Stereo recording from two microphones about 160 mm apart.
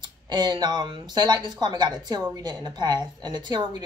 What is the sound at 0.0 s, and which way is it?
Speech, 25° right (ahead or behind).